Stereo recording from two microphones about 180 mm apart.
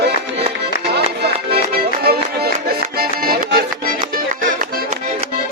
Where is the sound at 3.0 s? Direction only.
55° right (ahead or behind).